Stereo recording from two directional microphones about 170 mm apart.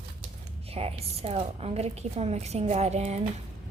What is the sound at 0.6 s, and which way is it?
A woman's voice, 35° right (ahead or behind).